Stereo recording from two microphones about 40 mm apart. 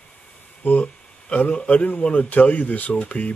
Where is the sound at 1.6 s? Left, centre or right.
Left.